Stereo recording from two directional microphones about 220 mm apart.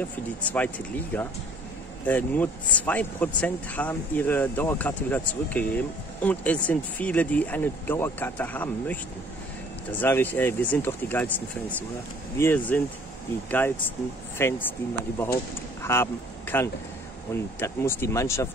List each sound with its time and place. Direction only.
0.5 s speech: 5° left (ahead or behind)
15.8 s speech: 10° left (ahead or behind)